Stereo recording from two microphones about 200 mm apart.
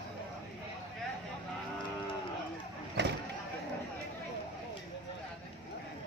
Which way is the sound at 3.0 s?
60° right (ahead or behind).